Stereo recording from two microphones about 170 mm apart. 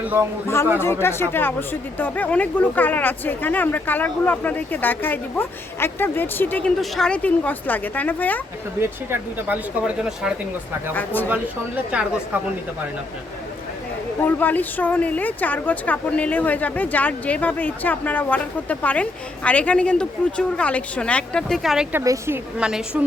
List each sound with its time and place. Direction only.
0.0 s speech: 10° right (ahead or behind)
0.4 s a woman's voice: 15° left (ahead or behind)
8.8 s speech: 10° right (ahead or behind)
10.9 s a woman's voice: 10° left (ahead or behind)
11.9 s speech: 5° right (ahead or behind)
14.2 s a woman's voice: 10° left (ahead or behind)
21.9 s speech: 15° right (ahead or behind)
22.5 s a woman's voice: 5° right (ahead or behind)